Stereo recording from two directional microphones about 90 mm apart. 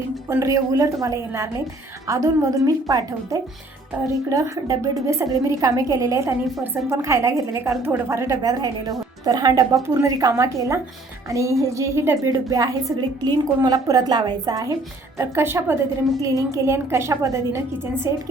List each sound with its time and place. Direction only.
0.3 s a woman's voice: 35° right (ahead or behind)
15.2 s speech: 30° right (ahead or behind)
16.2 s a woman's voice: 40° right (ahead or behind)